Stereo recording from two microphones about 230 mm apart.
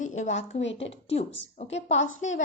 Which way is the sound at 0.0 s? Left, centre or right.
Left.